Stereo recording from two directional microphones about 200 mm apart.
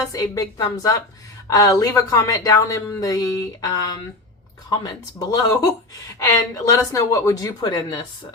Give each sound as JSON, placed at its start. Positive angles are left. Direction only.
{"t": 0.0, "sound": "a woman's voice", "side_deg": 20}
{"t": 5.3, "sound": "a woman's voice", "side_deg": 20}